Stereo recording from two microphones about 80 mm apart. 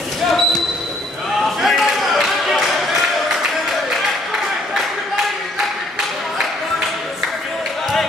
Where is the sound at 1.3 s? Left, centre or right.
Centre.